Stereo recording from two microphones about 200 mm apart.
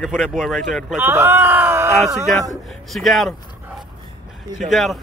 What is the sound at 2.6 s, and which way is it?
Speech, centre (ahead or behind).